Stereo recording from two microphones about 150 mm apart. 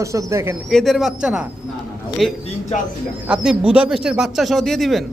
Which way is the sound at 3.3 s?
5° right (ahead or behind).